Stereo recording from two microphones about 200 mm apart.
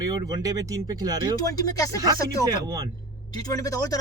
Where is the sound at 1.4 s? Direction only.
20° left (ahead or behind).